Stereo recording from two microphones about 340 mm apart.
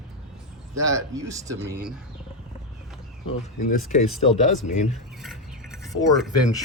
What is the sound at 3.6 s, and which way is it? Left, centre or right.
Speech, left.